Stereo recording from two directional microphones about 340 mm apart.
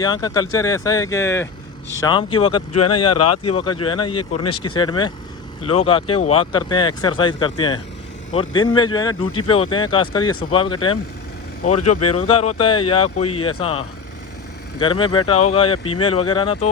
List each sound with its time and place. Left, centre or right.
0.0 s speech: centre
2.7 s speech: left
3.5 s speech: centre
11.6 s speech: left
12.7 s speech: centre